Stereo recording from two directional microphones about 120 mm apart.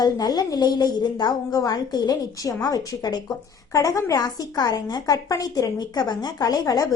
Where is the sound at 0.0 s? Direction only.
35° left (ahead or behind).